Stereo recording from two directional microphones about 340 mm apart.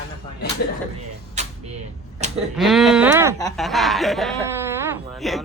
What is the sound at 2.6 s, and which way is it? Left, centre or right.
Speech, centre.